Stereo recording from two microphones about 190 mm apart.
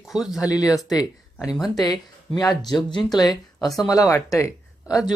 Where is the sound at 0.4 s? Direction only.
20° left (ahead or behind).